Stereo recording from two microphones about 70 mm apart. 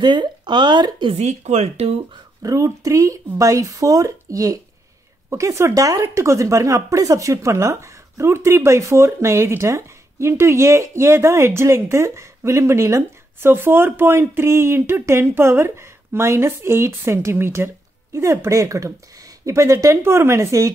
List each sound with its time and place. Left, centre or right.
0.0 s speech: right
2.4 s speech: right